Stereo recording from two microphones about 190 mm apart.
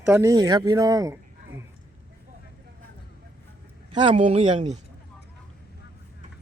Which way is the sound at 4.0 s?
30° right (ahead or behind).